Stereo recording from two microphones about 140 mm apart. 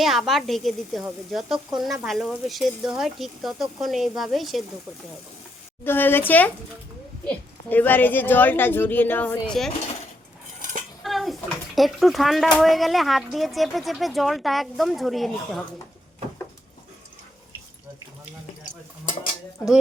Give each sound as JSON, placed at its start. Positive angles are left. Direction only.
{"t": 0.0, "sound": "speech", "side_deg": 0}
{"t": 5.8, "sound": "a woman's voice", "side_deg": 15}
{"t": 10.6, "sound": "cutlery", "side_deg": -65}
{"t": 11.0, "sound": "bathtub", "side_deg": 0}
{"t": 11.7, "sound": "speech", "side_deg": 0}